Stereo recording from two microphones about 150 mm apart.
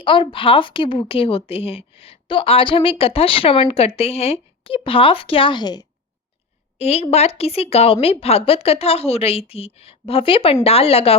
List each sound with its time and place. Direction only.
0.0 s a woman's voice: 35° left (ahead or behind)
6.7 s a woman's voice: 45° left (ahead or behind)